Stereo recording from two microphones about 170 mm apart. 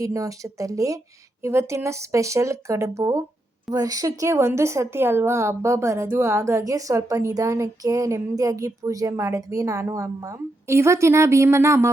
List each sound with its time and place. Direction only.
0.0 s a woman's voice: 20° right (ahead or behind)